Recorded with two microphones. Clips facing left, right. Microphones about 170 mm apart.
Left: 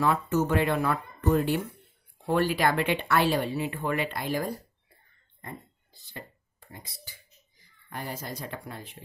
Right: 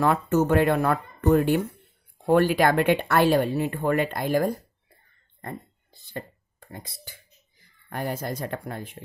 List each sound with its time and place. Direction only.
0.0 s speech: 50° right (ahead or behind)
6.1 s a sound: 55° right (ahead or behind)
7.9 s speech: 55° right (ahead or behind)